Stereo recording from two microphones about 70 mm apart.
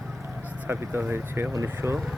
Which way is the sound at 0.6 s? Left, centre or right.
Right.